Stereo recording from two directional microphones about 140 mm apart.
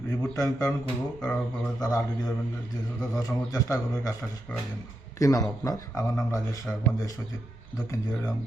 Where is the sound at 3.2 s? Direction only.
25° left (ahead or behind).